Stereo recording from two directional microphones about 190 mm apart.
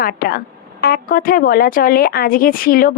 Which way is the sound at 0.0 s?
50° left (ahead or behind).